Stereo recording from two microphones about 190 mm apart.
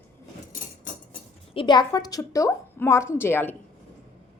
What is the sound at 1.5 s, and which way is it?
A woman's voice, 25° left (ahead or behind).